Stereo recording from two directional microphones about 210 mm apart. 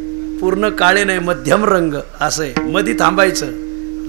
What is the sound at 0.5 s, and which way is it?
A man's voice, 20° right (ahead or behind).